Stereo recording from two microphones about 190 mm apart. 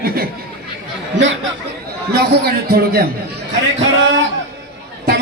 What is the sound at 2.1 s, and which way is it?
Speech, 55° right (ahead or behind).